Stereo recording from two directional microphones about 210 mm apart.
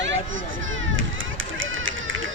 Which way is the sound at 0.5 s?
65° right (ahead or behind).